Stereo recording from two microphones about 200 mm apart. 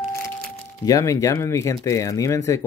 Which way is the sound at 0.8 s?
15° left (ahead or behind).